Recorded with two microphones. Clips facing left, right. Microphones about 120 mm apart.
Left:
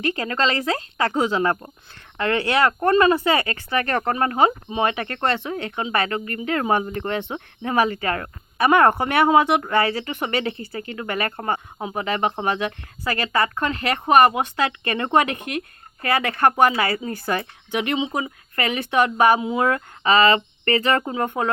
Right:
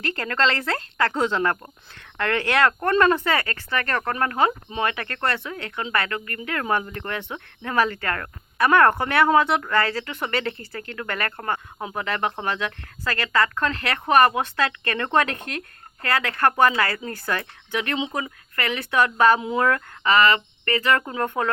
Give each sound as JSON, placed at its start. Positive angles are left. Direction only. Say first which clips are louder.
{"t": 0.0, "sound": "speech", "louder": "left 1 dB", "side_deg": 10}
{"t": 19.4, "sound": "speech", "louder": "left 1 dB", "side_deg": 5}
{"t": 19.6, "sound": "speech", "louder": "left 1 dB", "side_deg": 20}